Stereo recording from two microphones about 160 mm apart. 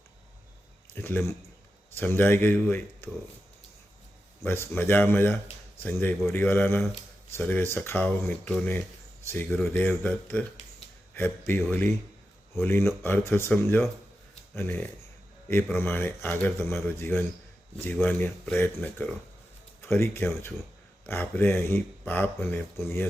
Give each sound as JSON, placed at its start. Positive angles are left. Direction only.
{"t": 1.0, "sound": "speech", "side_deg": 15}
{"t": 4.4, "sound": "speech", "side_deg": 15}